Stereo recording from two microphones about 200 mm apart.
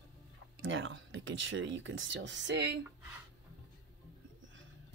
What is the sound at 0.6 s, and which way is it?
Speech, 70° right (ahead or behind).